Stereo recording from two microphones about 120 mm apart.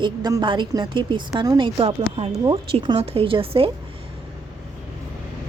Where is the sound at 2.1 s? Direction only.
55° right (ahead or behind).